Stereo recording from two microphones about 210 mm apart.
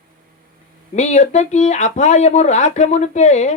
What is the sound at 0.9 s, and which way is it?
Speech, 35° left (ahead or behind).